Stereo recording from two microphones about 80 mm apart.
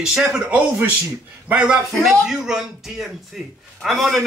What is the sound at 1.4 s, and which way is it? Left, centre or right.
Speech, centre.